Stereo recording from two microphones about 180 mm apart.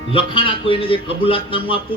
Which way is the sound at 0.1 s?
30° left (ahead or behind).